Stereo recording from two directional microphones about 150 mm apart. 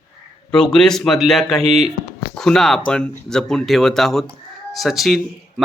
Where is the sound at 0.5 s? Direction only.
5° left (ahead or behind).